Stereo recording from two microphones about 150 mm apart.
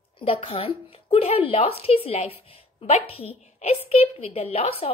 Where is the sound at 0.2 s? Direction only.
40° left (ahead or behind).